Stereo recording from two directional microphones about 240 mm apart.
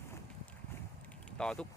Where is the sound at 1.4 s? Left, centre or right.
Centre.